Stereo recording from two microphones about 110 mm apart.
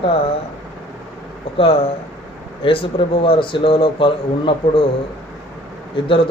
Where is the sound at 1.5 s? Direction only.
60° left (ahead or behind).